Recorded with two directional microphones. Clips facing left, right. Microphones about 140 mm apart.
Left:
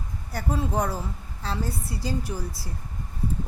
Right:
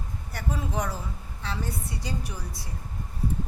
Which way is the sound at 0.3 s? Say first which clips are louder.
Left 4 dB; 35° left (ahead or behind).